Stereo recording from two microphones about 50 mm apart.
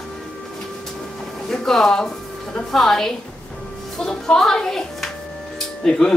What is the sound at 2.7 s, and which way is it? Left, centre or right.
A woman's voice, centre.